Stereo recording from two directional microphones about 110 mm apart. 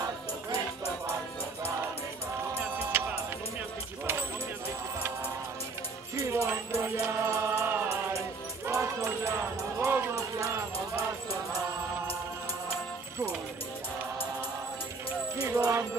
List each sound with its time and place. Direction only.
2.8 s music: 20° right (ahead or behind)
6.1 s music: 25° right (ahead or behind)
15.4 s music: 25° right (ahead or behind)